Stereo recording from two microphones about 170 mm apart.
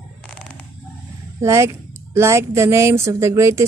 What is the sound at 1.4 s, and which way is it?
Speech, 15° right (ahead or behind).